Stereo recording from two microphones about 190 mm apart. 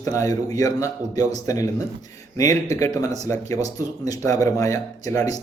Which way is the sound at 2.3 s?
15° left (ahead or behind).